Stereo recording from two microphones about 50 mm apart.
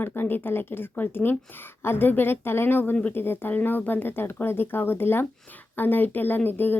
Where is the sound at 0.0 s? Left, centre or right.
Left.